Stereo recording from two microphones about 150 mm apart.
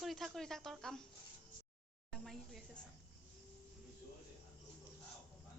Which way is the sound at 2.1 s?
Centre (ahead or behind).